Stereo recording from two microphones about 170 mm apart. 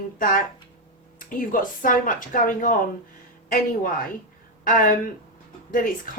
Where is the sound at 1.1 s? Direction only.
55° left (ahead or behind).